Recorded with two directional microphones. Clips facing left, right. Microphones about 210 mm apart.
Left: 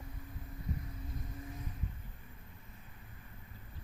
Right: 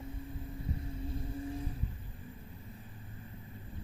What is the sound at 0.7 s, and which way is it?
Vehicle, 30° right (ahead or behind).